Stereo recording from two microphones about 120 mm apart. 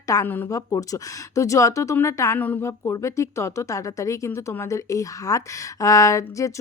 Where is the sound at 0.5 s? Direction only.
25° left (ahead or behind).